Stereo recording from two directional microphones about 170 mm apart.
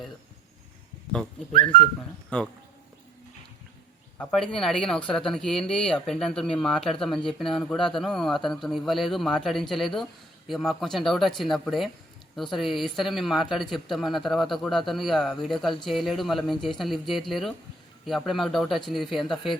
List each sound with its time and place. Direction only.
1.5 s speech: 30° left (ahead or behind)
2.0 s a man's voice: 5° left (ahead or behind)
4.2 s a man's voice: centre (ahead or behind)